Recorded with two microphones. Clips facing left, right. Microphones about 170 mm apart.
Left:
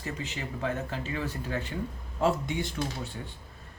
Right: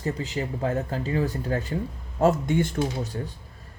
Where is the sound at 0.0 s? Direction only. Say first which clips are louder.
Right 8 dB; 35° right (ahead or behind).